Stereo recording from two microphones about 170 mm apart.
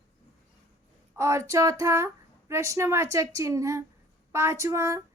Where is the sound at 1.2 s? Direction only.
15° right (ahead or behind).